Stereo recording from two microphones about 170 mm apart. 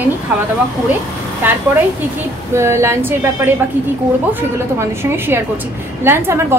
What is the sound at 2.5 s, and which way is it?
A woman's voice, 15° right (ahead or behind).